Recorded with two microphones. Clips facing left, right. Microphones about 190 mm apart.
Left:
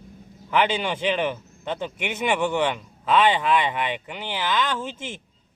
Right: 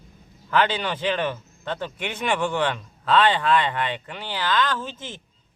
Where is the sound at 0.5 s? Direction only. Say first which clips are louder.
Even; 10° left (ahead or behind).